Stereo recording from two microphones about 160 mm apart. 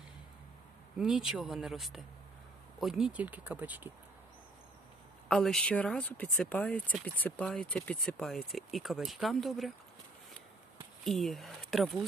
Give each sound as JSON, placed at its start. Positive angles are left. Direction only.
{"t": 0.9, "sound": "speech", "side_deg": -5}
{"t": 5.3, "sound": "speech", "side_deg": 0}
{"t": 11.0, "sound": "speech", "side_deg": 0}